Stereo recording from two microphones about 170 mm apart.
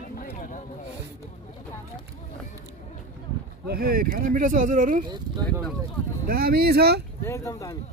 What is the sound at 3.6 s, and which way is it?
Speech, 60° right (ahead or behind).